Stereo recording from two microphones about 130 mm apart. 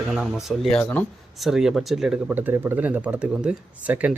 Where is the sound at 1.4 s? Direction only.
5° right (ahead or behind).